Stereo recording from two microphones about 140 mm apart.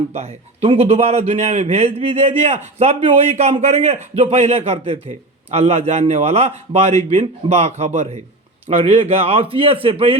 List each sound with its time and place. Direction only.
0.1 s a man's voice: 50° right (ahead or behind)